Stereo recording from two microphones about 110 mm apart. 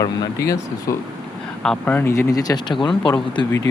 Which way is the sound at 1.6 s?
5° left (ahead or behind).